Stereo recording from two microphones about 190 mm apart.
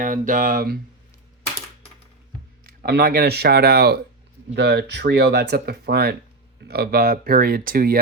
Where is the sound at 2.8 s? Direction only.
55° right (ahead or behind).